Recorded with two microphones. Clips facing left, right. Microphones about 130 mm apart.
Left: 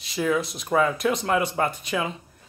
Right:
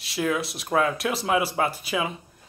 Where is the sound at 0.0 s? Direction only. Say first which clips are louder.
Left 2 dB; centre (ahead or behind).